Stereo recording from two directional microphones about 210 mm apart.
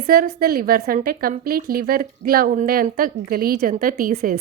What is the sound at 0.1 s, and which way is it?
A woman's voice, 45° right (ahead or behind).